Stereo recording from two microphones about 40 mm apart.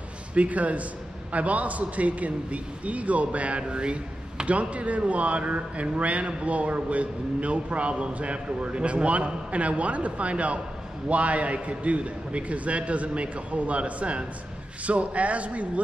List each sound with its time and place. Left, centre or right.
0.3 s a man's voice: right